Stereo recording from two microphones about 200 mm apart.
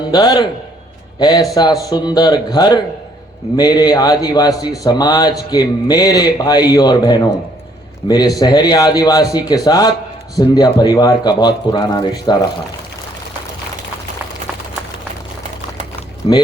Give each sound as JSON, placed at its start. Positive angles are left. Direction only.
{"t": 0.1, "sound": "a man's voice", "side_deg": 20}
{"t": 16.2, "sound": "a man's voice", "side_deg": 25}